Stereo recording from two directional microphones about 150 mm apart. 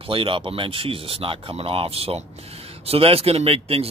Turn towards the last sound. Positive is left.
turn(degrees=-40)  # may be behind; listen again after turning